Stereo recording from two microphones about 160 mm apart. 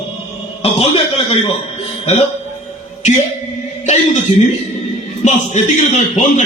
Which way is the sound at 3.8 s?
50° left (ahead or behind).